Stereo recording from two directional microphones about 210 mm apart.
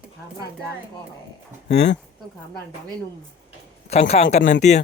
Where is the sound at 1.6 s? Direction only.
55° left (ahead or behind).